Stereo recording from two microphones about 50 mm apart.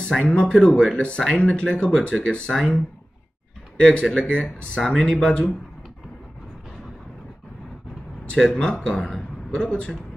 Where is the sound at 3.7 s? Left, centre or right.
Left.